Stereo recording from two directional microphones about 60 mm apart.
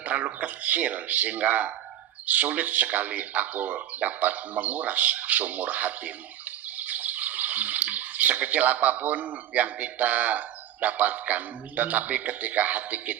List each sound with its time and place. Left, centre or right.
0.0 s speech: right